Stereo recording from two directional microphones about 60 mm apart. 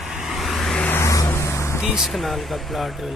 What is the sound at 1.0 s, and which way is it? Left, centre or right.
Vehicle, left.